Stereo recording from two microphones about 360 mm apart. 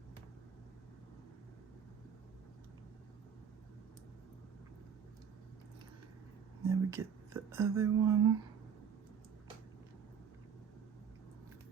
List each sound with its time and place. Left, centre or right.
6.7 s speech: centre